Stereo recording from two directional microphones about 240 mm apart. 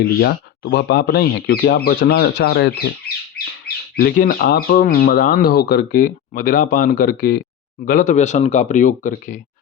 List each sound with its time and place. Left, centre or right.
0.0 s speech: left
3.9 s speech: left